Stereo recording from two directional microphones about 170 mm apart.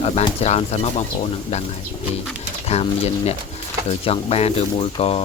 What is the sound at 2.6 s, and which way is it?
Speech, 40° left (ahead or behind).